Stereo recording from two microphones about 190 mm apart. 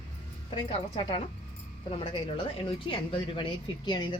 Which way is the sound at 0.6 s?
30° left (ahead or behind).